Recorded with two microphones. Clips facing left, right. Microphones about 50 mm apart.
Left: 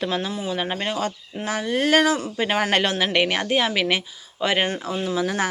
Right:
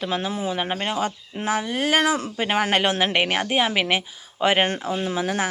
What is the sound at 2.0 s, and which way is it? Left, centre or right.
Speech, right.